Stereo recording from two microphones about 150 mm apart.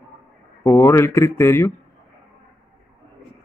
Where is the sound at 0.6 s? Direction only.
15° left (ahead or behind).